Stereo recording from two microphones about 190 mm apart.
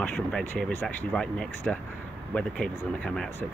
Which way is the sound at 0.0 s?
5° left (ahead or behind).